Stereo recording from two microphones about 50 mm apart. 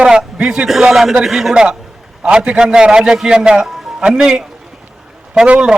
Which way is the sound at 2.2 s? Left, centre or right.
Right.